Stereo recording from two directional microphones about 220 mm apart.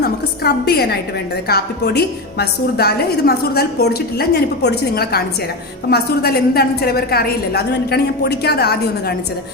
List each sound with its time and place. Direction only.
0.0 s a woman's voice: 45° left (ahead or behind)